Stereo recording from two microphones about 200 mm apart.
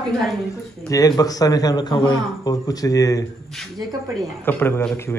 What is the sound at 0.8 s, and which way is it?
A man's voice, 15° left (ahead or behind).